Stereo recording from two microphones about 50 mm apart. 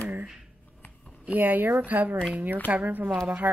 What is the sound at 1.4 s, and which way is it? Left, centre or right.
Speech, right.